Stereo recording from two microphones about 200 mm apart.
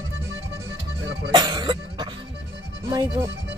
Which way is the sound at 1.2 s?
20° right (ahead or behind).